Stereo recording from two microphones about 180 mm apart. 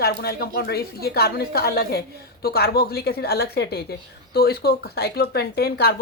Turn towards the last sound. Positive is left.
turn(degrees=65)  # may be behind; listen again after turning